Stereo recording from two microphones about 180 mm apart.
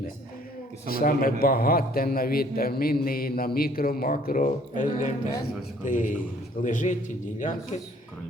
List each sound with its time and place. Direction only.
0.9 s a man's voice: 55° left (ahead or behind)